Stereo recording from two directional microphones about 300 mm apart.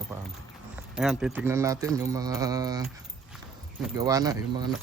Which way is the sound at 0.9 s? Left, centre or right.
Centre.